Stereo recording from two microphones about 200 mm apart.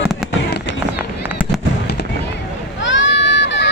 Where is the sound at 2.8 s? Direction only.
65° left (ahead or behind).